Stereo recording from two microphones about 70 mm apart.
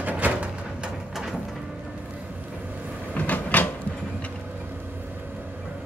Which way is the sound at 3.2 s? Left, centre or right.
Left.